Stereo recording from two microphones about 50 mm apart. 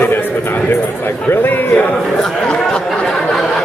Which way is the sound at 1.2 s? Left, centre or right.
Left.